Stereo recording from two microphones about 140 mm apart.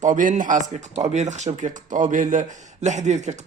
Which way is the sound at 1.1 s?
55° right (ahead or behind).